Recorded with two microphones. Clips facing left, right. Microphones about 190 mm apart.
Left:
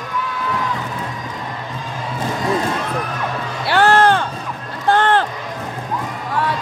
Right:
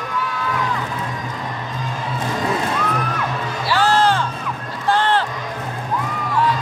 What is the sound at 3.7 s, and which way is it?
Music, 60° left (ahead or behind).